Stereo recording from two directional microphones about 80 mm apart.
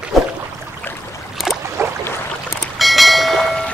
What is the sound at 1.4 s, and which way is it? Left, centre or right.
Boat, centre.